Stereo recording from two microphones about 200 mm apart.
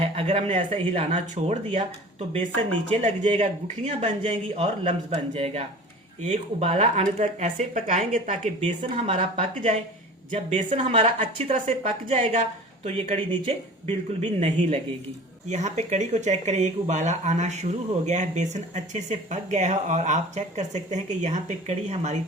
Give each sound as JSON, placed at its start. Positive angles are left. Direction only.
{"t": 0.0, "sound": "a man's voice", "side_deg": -30}
{"t": 2.9, "sound": "a man's voice", "side_deg": -30}